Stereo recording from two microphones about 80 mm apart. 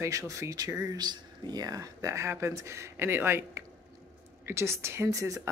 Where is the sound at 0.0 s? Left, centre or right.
Right.